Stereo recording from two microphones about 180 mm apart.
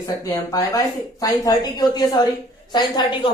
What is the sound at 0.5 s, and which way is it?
A woman's voice, 20° left (ahead or behind).